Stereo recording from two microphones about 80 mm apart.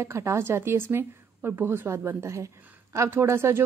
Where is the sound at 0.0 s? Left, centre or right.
Right.